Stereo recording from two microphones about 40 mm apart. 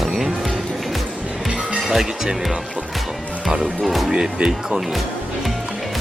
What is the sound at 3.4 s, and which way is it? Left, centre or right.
Speech, centre.